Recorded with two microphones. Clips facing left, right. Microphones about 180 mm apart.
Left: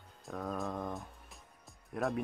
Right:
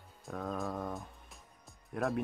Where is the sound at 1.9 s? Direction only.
Centre (ahead or behind).